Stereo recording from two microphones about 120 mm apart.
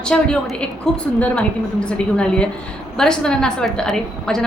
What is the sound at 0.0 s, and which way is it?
A woman's voice, 5° left (ahead or behind).